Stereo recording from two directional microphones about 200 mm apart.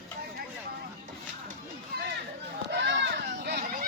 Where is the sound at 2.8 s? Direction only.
55° right (ahead or behind).